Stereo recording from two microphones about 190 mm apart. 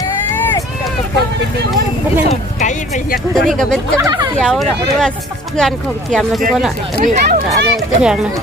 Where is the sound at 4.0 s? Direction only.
20° right (ahead or behind).